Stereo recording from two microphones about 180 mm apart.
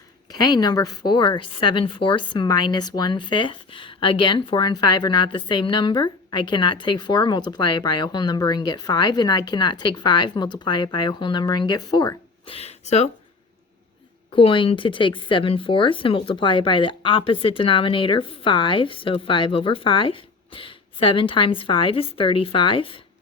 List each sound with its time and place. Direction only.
0.3 s speech: 25° left (ahead or behind)
14.3 s speech: 30° left (ahead or behind)